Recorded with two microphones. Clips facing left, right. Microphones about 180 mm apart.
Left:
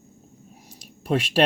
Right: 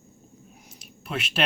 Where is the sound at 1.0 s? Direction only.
40° left (ahead or behind).